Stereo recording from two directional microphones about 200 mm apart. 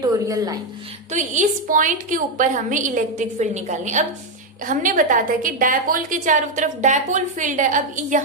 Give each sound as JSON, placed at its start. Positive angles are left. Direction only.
{"t": 0.0, "sound": "speech", "side_deg": -15}
{"t": 1.1, "sound": "a woman's voice", "side_deg": -35}